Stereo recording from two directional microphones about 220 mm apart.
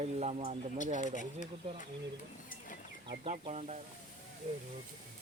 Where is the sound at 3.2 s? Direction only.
30° right (ahead or behind).